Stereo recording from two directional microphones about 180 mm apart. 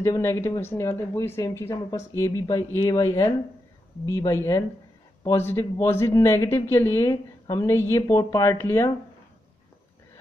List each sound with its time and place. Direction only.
0.0 s speech: 15° left (ahead or behind)